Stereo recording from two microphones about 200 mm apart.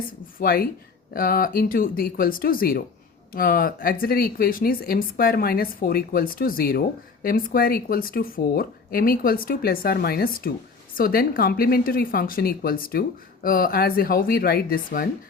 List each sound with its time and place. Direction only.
0.3 s speech: 45° left (ahead or behind)